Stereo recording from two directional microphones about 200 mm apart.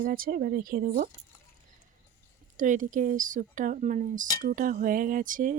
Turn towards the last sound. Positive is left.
turn(degrees=-40)  # may be behind; listen again after turning